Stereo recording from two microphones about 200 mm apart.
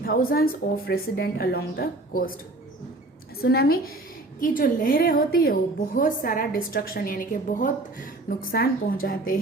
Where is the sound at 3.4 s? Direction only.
50° left (ahead or behind).